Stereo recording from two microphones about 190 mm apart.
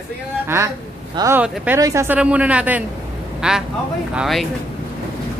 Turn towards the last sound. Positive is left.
turn(degrees=0)  # may be behind; listen again after turning